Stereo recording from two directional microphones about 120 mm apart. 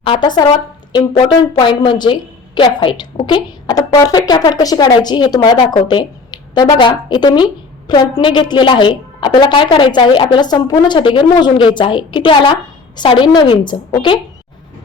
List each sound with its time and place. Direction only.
0.0 s speech: 45° left (ahead or behind)
1.6 s a woman's voice: 40° left (ahead or behind)